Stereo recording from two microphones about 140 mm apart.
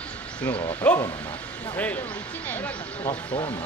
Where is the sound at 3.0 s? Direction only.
35° left (ahead or behind).